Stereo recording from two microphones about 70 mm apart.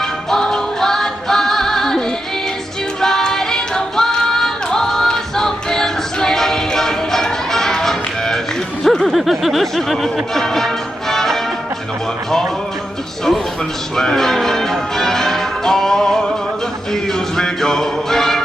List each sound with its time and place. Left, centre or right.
0.0 s music: centre
3.0 s singing: centre
8.8 s music: centre
13.9 s change ringing: centre
16.9 s music: centre